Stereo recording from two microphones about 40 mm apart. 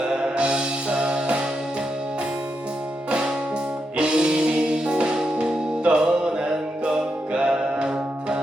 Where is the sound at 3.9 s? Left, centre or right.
Right.